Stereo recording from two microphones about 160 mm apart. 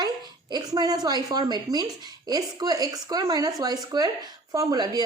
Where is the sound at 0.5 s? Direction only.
25° right (ahead or behind).